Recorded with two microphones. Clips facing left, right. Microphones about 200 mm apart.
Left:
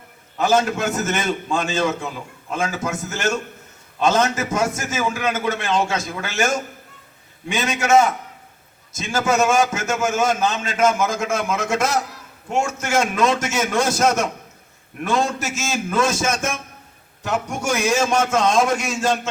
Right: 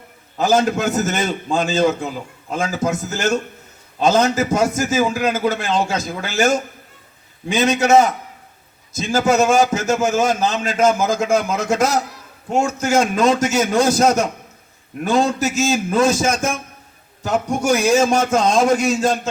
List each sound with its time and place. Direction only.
0.3 s a man's voice: 35° right (ahead or behind)